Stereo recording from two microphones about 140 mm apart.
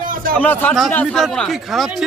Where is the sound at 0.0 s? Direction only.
85° right.